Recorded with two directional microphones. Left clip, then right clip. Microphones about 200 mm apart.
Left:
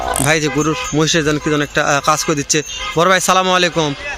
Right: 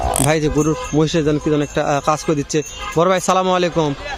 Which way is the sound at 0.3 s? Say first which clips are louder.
Left 2 dB; 10° right (ahead or behind).